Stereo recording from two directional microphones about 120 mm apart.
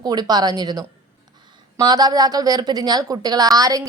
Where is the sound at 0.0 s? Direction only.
35° right (ahead or behind).